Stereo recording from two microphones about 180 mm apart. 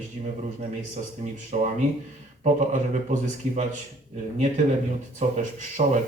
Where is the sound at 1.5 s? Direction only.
40° right (ahead or behind).